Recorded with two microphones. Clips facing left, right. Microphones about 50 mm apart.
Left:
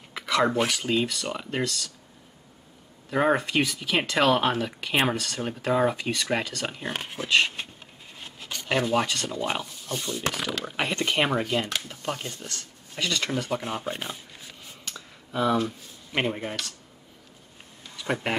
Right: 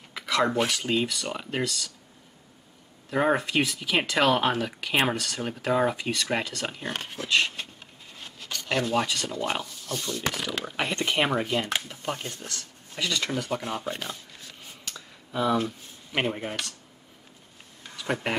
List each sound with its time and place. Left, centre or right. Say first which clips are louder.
0.1 s a sound: left 1 dB; centre
0.8 s speech: left 1 dB; centre
3.1 s speech: left 1 dB; centre
8.2 s a sound: even; centre
9.0 s speech: left 1 dB; centre
13.6 s speech: even; centre
14.9 s a sound: left 1 dB; centre
16.1 s speech: left 1 dB; centre
18.0 s speech: left 1 dB; centre